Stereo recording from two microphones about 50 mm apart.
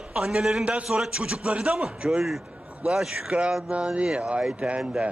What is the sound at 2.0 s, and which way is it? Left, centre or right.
A man's voice, centre.